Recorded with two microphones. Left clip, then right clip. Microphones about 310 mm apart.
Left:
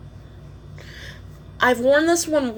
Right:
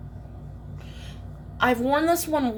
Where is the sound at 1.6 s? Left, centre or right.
Centre.